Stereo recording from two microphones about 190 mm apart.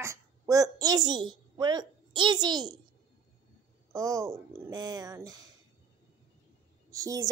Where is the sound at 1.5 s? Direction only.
20° right (ahead or behind).